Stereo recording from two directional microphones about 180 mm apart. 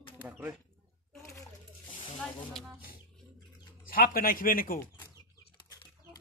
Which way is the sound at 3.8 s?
55° left (ahead or behind).